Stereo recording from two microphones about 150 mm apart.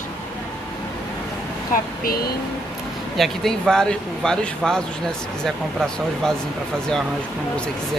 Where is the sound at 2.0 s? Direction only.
90° left.